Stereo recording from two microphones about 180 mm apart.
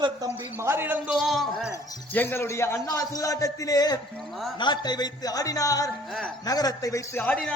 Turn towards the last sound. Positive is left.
turn(degrees=5)  # may be behind; listen again after turning